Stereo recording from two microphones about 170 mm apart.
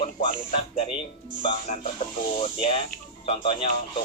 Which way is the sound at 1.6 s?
45° left (ahead or behind).